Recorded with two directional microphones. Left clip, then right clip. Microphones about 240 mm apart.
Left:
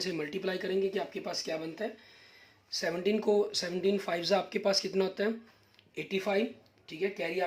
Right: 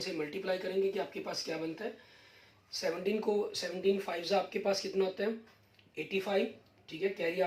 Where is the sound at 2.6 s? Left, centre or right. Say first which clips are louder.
Left 3 dB; left.